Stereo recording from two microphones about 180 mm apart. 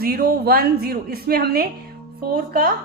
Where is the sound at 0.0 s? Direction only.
55° right (ahead or behind).